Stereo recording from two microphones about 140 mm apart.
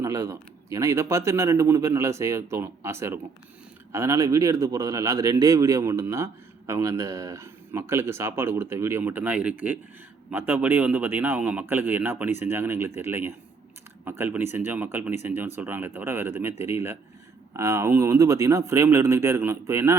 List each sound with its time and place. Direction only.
0.0 s speech: 25° right (ahead or behind)